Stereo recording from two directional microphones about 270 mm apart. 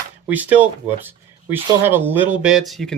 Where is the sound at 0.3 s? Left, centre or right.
Centre.